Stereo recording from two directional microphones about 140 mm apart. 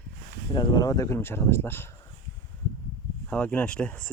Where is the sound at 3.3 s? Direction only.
10° left (ahead or behind).